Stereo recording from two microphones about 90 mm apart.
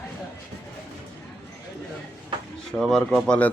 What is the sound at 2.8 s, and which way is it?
Speech, 5° left (ahead or behind).